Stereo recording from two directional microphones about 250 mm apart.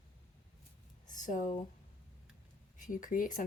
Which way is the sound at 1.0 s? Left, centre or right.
Left.